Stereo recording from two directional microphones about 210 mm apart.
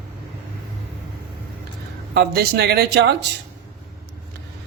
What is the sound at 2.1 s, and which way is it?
Speech, 50° right (ahead or behind).